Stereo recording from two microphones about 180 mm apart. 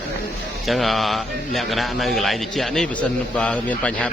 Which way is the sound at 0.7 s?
Centre (ahead or behind).